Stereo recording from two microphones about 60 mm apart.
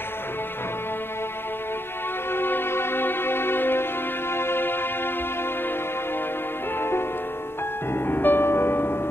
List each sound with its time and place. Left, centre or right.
2.3 s music: left
6.8 s music: left